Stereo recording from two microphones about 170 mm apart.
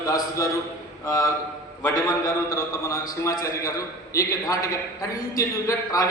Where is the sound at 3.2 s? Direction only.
15° left (ahead or behind).